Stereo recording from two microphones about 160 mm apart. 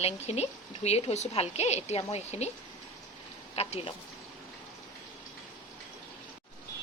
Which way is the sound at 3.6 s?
40° left (ahead or behind).